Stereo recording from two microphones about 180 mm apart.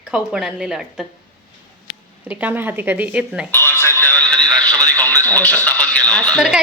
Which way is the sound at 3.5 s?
10° left (ahead or behind).